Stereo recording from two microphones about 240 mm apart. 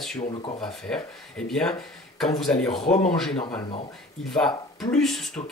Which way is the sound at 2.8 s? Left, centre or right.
Left.